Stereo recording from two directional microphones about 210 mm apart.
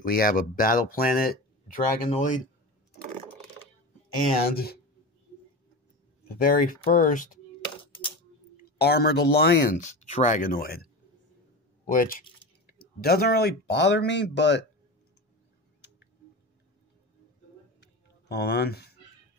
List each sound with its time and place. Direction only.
0.0 s speech: 45° left (ahead or behind)
4.5 s speech: 45° left (ahead or behind)
6.2 s speech: 45° left (ahead or behind)
7.8 s a sound: 25° left (ahead or behind)
8.7 s speech: 50° left (ahead or behind)
9.8 s speech: 35° left (ahead or behind); by 14.6 s 55° left (ahead or behind)
18.3 s speech: 50° left (ahead or behind)